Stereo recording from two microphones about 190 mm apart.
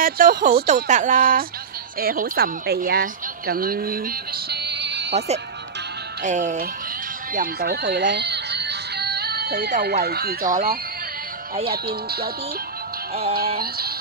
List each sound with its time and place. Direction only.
0.0 s speech: 45° right (ahead or behind)
0.8 s a woman's voice: 40° right (ahead or behind); by 5.1 s 65° right (ahead or behind)
6.2 s speech: 40° right (ahead or behind)
13.6 s music: 55° right (ahead or behind)